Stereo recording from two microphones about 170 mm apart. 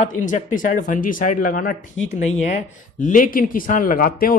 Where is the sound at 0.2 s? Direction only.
50° left (ahead or behind).